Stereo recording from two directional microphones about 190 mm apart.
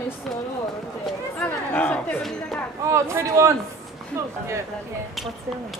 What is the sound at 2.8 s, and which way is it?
A man's voice, 15° right (ahead or behind).